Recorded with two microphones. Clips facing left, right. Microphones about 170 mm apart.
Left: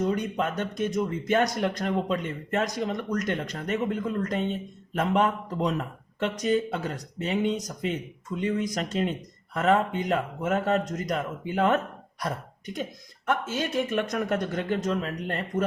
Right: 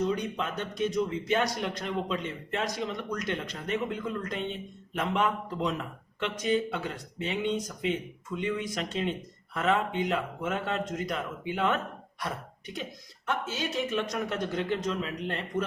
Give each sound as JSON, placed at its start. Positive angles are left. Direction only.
{"t": 0.0, "sound": "a man's voice", "side_deg": 50}
{"t": 13.2, "sound": "a man's voice", "side_deg": 50}